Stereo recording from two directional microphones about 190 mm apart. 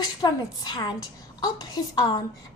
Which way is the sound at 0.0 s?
20° left (ahead or behind).